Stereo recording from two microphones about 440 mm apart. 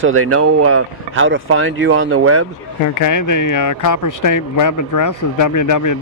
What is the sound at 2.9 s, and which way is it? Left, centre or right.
Speech, left.